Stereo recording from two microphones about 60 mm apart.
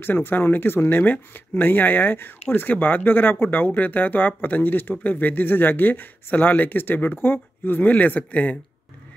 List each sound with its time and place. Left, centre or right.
0.0 s speech: left